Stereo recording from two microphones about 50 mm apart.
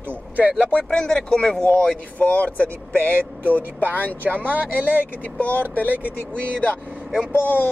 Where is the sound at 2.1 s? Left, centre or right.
Left.